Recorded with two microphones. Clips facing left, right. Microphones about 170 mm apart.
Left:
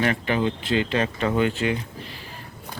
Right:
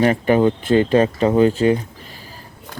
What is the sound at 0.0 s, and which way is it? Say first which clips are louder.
Speech: right 8 dB; 40° right (ahead or behind).